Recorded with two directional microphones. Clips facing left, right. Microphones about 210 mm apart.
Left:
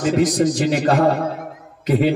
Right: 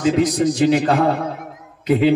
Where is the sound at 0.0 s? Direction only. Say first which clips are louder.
Even; 45° left (ahead or behind).